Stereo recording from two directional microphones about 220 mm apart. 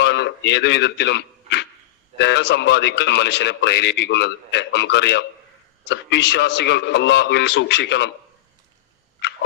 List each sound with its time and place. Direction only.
0.0 s radio: 50° left (ahead or behind)
2.1 s a man's voice: 50° left (ahead or behind)